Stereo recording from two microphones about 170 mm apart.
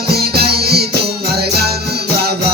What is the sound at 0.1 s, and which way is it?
Music, 65° right (ahead or behind).